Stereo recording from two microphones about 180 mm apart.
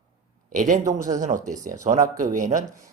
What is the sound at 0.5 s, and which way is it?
Speech, 45° right (ahead or behind).